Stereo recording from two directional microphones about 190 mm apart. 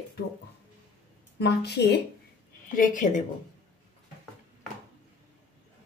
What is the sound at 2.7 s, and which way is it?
Speech, 45° left (ahead or behind).